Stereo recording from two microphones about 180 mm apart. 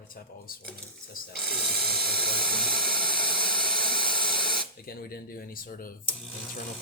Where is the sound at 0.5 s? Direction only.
55° left (ahead or behind).